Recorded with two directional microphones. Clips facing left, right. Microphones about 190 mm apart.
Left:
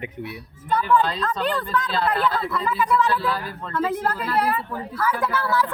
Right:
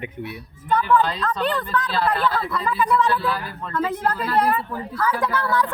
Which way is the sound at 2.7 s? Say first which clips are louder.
Right 1 dB; centre (ahead or behind).